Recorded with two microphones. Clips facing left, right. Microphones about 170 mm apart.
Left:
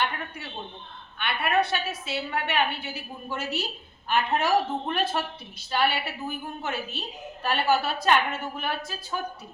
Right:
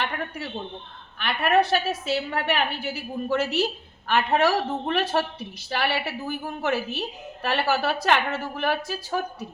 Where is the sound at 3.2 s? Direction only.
90° right.